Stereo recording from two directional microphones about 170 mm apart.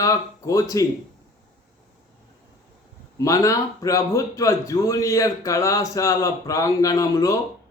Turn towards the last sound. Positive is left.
turn(degrees=20)  # may be behind; listen again after turning